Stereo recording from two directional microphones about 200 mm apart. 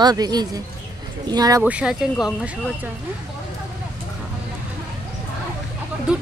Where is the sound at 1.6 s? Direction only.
5° right (ahead or behind).